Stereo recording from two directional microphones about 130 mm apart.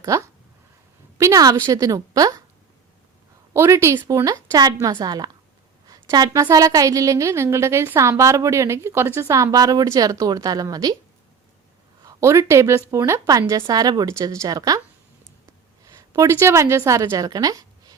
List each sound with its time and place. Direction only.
0.0 s a woman's voice: 25° right (ahead or behind)
3.5 s a woman's voice: 20° right (ahead or behind)
12.0 s a woman's voice: 20° right (ahead or behind)
16.0 s a woman's voice: 20° right (ahead or behind)